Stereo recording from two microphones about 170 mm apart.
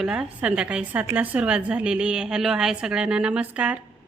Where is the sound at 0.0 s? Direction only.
5° right (ahead or behind).